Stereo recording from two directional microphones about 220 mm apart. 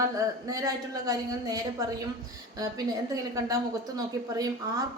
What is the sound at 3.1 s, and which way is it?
A woman's voice, 15° right (ahead or behind).